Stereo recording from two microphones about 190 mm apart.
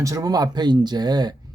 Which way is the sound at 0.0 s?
15° right (ahead or behind).